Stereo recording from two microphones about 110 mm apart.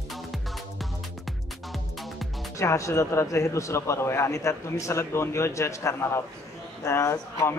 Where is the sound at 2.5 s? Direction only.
30° left (ahead or behind).